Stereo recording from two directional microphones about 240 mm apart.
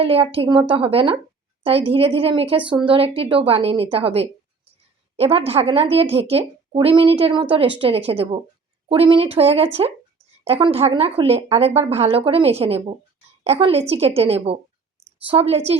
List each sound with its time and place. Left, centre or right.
0.0 s a woman's voice: right